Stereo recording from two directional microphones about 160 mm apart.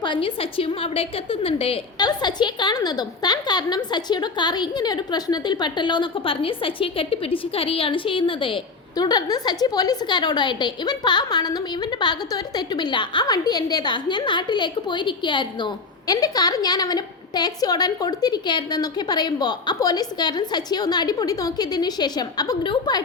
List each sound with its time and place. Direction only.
0.0 s a woman's voice: 30° left (ahead or behind)
2.0 s a woman's voice: 25° left (ahead or behind)